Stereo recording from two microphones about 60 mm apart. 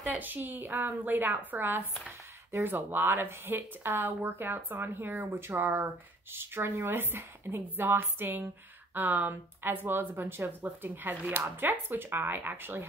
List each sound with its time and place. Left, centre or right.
0.2 s speech: right
5.3 s speech: right